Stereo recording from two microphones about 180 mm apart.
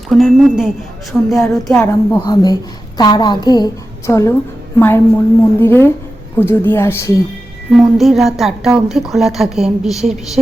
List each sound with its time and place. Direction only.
0.1 s a woman's voice: centre (ahead or behind)
1.8 s a woman's voice: 15° left (ahead or behind)
7.8 s a woman's voice: centre (ahead or behind)